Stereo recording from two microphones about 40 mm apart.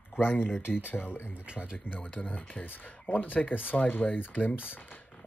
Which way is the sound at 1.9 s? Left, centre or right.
Left.